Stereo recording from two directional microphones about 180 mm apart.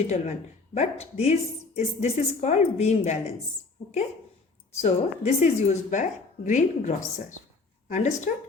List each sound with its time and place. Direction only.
0.1 s speech: 40° left (ahead or behind)
4.8 s speech: 40° left (ahead or behind)